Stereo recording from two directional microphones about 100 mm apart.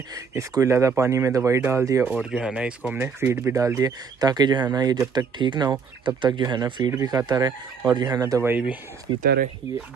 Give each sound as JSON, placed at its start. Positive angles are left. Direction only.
{"t": 0.1, "sound": "speech", "side_deg": -30}
{"t": 2.1, "sound": "speech", "side_deg": -5}
{"t": 8.4, "sound": "speech", "side_deg": -20}